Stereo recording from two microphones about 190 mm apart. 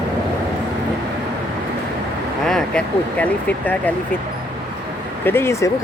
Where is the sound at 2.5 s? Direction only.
5° left (ahead or behind).